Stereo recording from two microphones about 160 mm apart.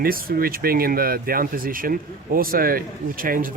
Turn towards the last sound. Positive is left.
turn(degrees=-60)  # may be behind; listen again after turning